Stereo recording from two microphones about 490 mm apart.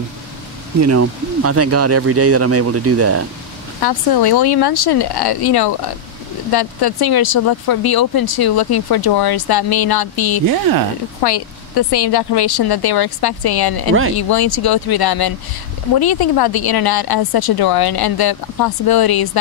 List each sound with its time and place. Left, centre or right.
0.7 s speech: right
3.8 s speech: left